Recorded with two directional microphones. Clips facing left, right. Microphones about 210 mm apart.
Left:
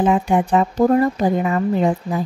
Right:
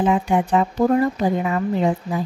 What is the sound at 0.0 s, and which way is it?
Speech, 45° left (ahead or behind).